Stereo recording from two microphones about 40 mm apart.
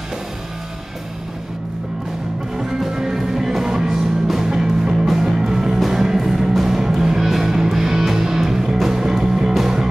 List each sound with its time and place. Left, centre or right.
2.5 s music: centre